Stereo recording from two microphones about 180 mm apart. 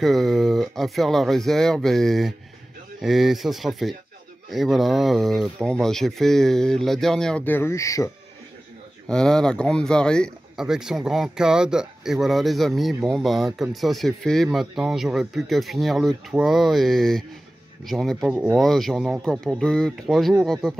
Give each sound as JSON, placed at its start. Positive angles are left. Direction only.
{"t": 0.0, "sound": "speech", "side_deg": 0}
{"t": 9.0, "sound": "speech", "side_deg": 5}